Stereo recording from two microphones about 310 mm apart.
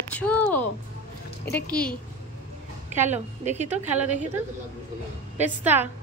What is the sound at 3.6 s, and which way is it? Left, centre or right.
Speech, centre.